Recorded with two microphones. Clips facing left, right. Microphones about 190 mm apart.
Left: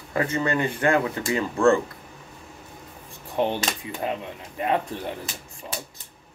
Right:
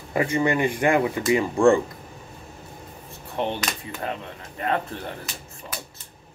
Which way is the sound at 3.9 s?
15° left (ahead or behind).